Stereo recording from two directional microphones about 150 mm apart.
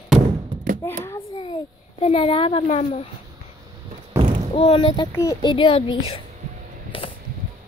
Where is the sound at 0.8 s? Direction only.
20° left (ahead or behind).